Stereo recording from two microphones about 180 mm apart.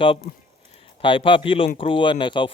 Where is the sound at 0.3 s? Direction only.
50° left (ahead or behind).